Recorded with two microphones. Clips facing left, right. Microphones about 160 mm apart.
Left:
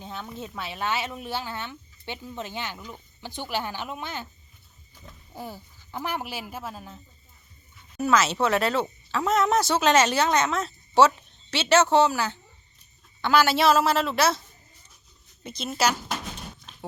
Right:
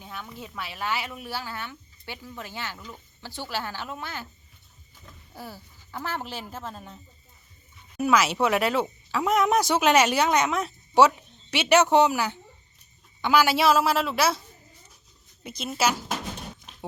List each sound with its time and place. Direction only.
0.0 s a woman's voice: 25° left (ahead or behind)
5.3 s speech: 20° left (ahead or behind); by 7.0 s 5° left (ahead or behind)
7.9 s a woman's voice: 10° right (ahead or behind)
15.4 s a woman's voice: 10° right (ahead or behind)